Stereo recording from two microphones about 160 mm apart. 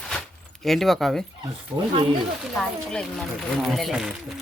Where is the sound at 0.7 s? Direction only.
Centre (ahead or behind).